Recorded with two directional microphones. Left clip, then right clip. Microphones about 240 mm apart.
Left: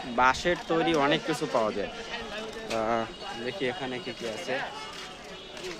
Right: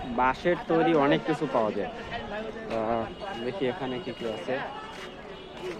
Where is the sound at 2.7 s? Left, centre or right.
Left.